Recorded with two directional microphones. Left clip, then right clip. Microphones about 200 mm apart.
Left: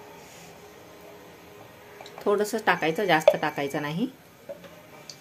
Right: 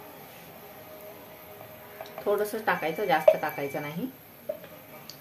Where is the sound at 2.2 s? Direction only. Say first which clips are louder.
Left 3 dB; 40° left (ahead or behind).